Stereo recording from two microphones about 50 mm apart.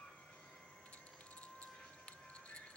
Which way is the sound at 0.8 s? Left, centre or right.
Left.